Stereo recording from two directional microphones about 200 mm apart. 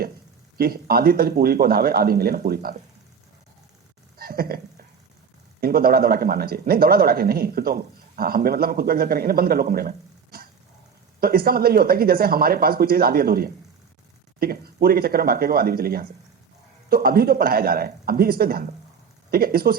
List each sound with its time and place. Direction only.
0.5 s speech: 50° right (ahead or behind)
4.2 s a sound: 50° right (ahead or behind)
5.5 s speech: 50° right (ahead or behind)
11.2 s speech: 50° right (ahead or behind)